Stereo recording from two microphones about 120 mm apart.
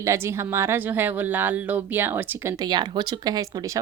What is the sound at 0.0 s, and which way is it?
Speech, 25° right (ahead or behind).